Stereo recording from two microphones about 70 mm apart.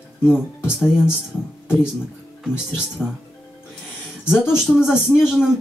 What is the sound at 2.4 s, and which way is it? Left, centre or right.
Speech, centre.